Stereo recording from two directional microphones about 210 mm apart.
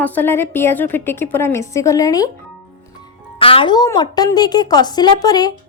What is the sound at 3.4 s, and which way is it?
A woman's voice, 25° left (ahead or behind).